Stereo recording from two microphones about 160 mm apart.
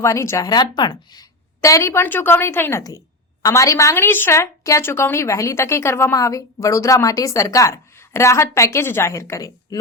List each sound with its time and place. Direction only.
0.0 s a woman's voice: 20° left (ahead or behind)